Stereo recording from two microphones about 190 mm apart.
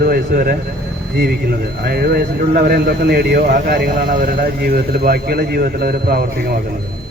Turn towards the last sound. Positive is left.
turn(degrees=-55)  # may be behind; listen again after turning